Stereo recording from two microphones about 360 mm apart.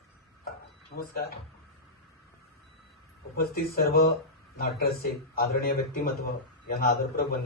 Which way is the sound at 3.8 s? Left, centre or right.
Left.